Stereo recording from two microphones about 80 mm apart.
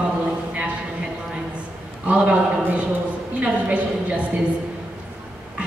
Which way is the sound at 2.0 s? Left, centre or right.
Centre.